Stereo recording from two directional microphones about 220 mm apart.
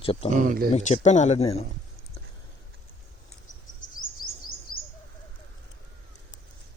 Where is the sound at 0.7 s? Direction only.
30° left (ahead or behind).